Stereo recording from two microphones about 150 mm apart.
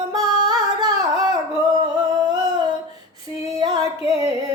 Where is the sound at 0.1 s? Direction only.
25° right (ahead or behind).